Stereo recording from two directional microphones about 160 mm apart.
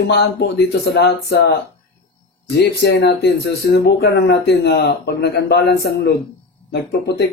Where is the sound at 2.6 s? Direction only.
85° left.